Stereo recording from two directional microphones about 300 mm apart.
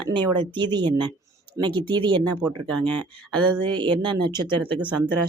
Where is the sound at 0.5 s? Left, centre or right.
Centre.